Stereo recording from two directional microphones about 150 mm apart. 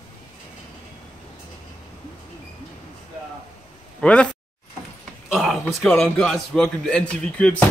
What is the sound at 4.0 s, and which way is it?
Speech, 5° left (ahead or behind).